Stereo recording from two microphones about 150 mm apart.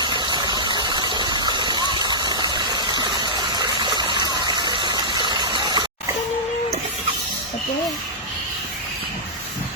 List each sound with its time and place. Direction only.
0.0 s engine: 30° right (ahead or behind)